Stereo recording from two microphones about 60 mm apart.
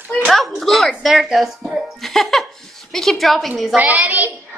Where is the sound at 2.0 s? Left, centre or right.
Centre.